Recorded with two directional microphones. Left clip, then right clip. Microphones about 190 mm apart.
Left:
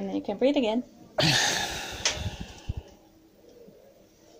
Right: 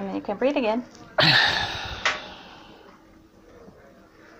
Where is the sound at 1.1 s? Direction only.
35° left (ahead or behind).